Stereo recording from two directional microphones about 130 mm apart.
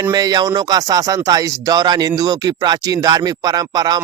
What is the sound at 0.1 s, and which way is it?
Speech, 30° right (ahead or behind).